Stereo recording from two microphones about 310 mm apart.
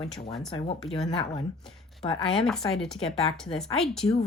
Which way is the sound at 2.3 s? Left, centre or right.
Centre.